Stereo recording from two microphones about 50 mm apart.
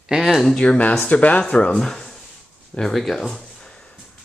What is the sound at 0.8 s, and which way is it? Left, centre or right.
Speech, left.